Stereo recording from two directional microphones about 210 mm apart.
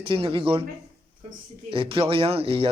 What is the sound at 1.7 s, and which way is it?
Speech, 25° right (ahead or behind).